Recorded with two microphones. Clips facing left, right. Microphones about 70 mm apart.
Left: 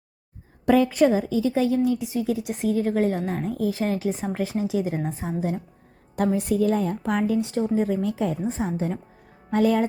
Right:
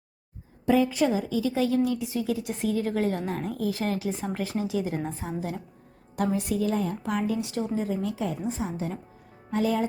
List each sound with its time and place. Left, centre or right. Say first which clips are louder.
0.6 s a woman's voice: left 3 dB; left
0.9 s a woman's voice: left 5 dB; left
6.1 s a woman's voice: left 4 dB; left
7.9 s a woman's voice: left 4 dB; left
9.5 s speech: left 5 dB; left